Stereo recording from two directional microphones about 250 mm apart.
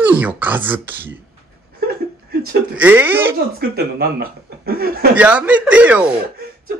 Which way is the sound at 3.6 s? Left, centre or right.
Right.